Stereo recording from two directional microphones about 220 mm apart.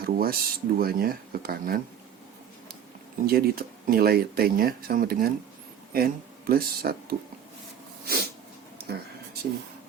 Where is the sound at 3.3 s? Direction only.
45° right (ahead or behind).